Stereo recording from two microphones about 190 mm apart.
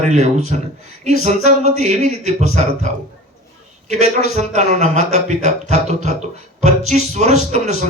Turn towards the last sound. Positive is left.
turn(degrees=-35)  # may be behind; listen again after turning